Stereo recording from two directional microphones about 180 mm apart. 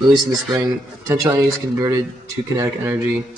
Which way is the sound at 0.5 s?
20° right (ahead or behind).